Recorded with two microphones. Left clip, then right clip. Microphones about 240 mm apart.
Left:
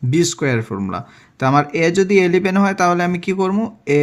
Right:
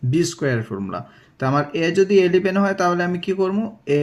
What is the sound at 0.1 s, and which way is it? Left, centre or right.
Speech, left.